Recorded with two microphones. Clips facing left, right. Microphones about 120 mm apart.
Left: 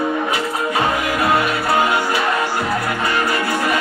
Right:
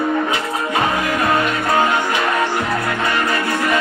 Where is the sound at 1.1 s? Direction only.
5° left (ahead or behind).